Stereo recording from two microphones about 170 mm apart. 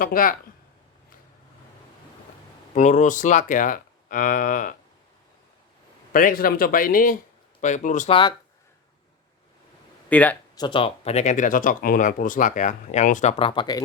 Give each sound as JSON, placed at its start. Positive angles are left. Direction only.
{"t": 0.0, "sound": "speech", "side_deg": 55}
{"t": 2.7, "sound": "speech", "side_deg": 45}
{"t": 6.1, "sound": "speech", "side_deg": 55}
{"t": 8.1, "sound": "speech", "side_deg": 25}
{"t": 10.1, "sound": "speech", "side_deg": 10}
{"t": 10.5, "sound": "speech", "side_deg": 25}
{"t": 13.4, "sound": "speech", "side_deg": 25}